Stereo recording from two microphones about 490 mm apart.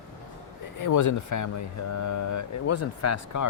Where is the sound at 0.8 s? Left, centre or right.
Left.